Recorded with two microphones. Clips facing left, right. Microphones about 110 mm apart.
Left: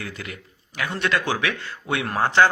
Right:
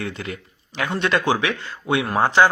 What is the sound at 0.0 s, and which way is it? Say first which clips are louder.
Speech: right 5 dB; 30° right (ahead or behind).